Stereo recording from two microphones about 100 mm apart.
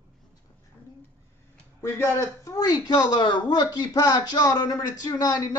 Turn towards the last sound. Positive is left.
turn(degrees=40)  # may be behind; listen again after turning